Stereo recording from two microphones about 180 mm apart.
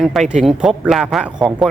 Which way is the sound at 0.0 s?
Centre (ahead or behind).